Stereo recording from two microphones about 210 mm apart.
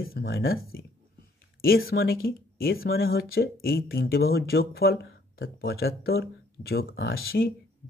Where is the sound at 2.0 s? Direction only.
45° left (ahead or behind).